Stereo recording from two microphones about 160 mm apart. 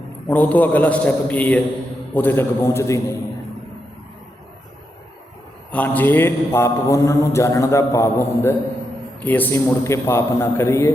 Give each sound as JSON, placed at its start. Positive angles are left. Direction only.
{"t": 0.3, "sound": "a man's voice", "side_deg": 10}
{"t": 5.7, "sound": "a man's voice", "side_deg": 10}